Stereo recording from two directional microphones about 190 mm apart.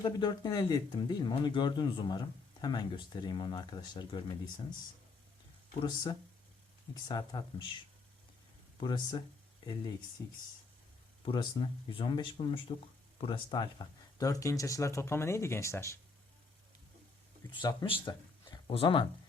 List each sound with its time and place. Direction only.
0.0 s speech: 20° left (ahead or behind)
5.8 s speech: 25° left (ahead or behind)
8.8 s speech: 25° left (ahead or behind)
10.2 s speech: 15° left (ahead or behind)
11.3 s speech: 25° left (ahead or behind)
17.6 s speech: 20° left (ahead or behind)